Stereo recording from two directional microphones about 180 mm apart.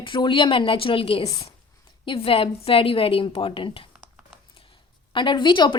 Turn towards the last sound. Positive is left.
turn(degrees=25)  # may be behind; listen again after turning